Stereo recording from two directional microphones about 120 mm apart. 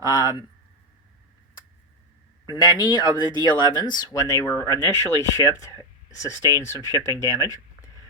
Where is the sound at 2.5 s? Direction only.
35° left (ahead or behind).